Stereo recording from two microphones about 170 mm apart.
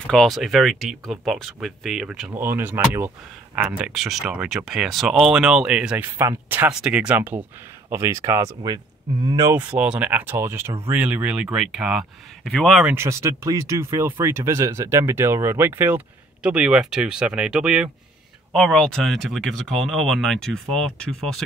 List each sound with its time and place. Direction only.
0.0 s speech: 5° left (ahead or behind); by 9.5 s 25° right (ahead or behind)
9.5 s speech: 10° right (ahead or behind)
12.9 s speech: 15° right (ahead or behind); by 21.4 s 5° left (ahead or behind)